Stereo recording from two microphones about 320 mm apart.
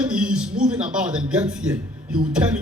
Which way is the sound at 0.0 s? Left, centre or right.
Centre.